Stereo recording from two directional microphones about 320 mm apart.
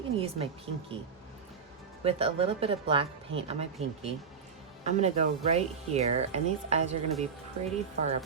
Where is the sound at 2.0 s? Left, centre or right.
Centre.